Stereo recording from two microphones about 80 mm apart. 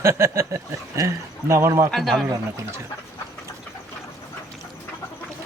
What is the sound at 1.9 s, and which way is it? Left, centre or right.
Speech, centre.